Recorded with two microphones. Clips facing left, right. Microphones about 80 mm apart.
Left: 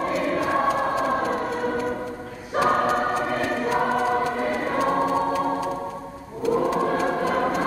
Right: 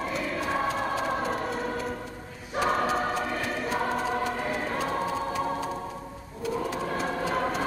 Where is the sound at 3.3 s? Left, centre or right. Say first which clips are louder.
Left 6 dB; left.